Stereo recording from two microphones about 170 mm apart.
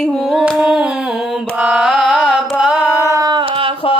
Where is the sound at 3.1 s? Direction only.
25° right (ahead or behind).